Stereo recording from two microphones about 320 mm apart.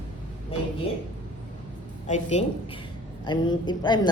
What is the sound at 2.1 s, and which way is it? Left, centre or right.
A woman's voice, left.